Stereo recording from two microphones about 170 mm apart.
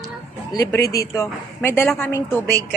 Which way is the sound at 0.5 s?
20° left (ahead or behind).